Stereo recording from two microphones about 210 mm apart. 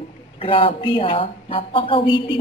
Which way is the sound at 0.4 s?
25° left (ahead or behind).